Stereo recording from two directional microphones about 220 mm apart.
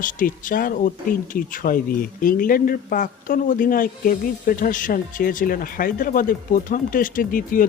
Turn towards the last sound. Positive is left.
turn(degrees=40)  # may be behind; listen again after turning